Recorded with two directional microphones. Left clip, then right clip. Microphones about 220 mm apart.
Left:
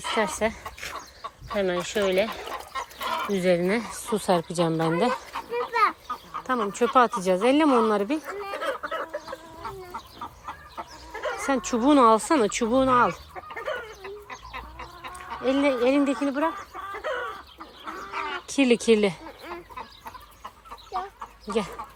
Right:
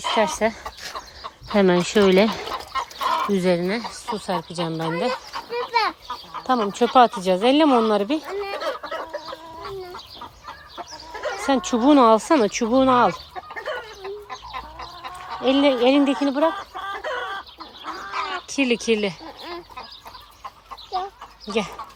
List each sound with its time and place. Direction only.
0.4 s speech: 25° right (ahead or behind)
0.9 s chicken: 35° right (ahead or behind); by 3.9 s 10° right (ahead or behind)
4.1 s speech: 5° right (ahead or behind)
5.5 s a sound: 40° right (ahead or behind)
6.5 s speech: 25° right (ahead or behind)
8.4 s chicken: 45° right (ahead or behind)
11.1 s a sound: 45° right (ahead or behind)
11.4 s speech: 25° right (ahead or behind)
14.0 s chicken: 30° right (ahead or behind)
17.0 s chicken: 45° right (ahead or behind)
18.1 s bird: 25° right (ahead or behind)
18.5 s speech: 10° right (ahead or behind)